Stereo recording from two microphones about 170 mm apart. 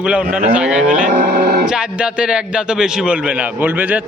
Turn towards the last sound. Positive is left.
turn(degrees=-10)  # may be behind; listen again after turning